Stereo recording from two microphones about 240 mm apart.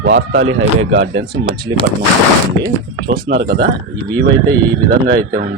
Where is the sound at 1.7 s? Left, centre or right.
Right.